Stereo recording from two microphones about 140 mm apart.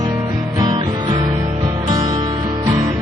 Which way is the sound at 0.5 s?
30° right (ahead or behind).